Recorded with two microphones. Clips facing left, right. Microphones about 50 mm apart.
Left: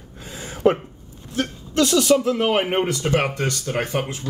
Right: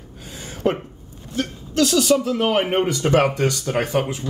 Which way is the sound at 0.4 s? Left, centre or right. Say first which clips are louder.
Left 3 dB; centre.